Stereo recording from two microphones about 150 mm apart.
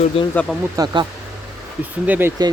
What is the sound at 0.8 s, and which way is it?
Speech, 25° right (ahead or behind).